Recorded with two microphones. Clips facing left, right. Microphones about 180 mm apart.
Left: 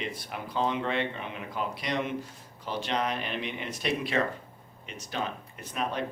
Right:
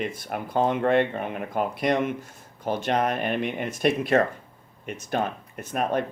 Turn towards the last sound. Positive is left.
turn(degrees=-50)  # may be behind; listen again after turning